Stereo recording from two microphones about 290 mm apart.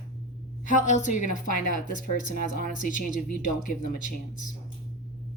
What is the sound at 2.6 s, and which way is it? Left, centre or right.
Speech, left.